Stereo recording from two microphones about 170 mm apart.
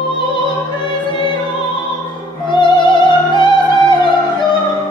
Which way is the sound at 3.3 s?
25° left (ahead or behind).